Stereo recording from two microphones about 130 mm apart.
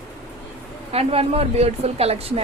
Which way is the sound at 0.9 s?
50° right (ahead or behind).